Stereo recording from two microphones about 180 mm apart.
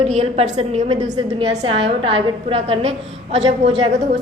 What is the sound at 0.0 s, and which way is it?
A woman's voice, 35° right (ahead or behind).